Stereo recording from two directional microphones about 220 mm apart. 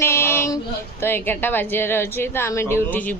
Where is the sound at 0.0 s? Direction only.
10° left (ahead or behind).